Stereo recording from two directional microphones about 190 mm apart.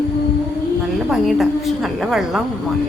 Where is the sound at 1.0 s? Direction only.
Centre (ahead or behind).